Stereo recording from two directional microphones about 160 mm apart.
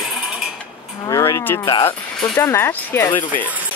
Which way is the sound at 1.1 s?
20° left (ahead or behind).